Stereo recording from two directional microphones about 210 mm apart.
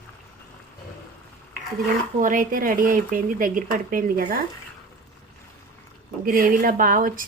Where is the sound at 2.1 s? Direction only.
40° right (ahead or behind).